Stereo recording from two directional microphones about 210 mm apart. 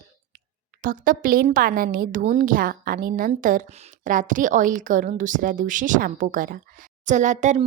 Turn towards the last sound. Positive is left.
turn(degrees=-35)  # may be behind; listen again after turning